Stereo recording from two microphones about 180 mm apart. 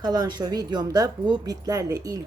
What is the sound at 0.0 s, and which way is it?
A woman's voice, 20° right (ahead or behind).